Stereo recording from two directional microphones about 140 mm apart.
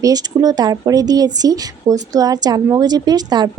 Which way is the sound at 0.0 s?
25° right (ahead or behind).